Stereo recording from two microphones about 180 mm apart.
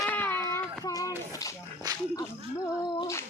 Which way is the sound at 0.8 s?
20° left (ahead or behind).